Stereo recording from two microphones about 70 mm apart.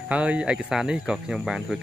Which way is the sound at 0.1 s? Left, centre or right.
Centre.